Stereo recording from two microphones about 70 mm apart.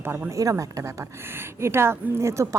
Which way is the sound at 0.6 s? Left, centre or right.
Right.